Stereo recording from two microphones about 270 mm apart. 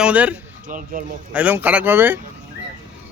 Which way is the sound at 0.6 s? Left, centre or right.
Right.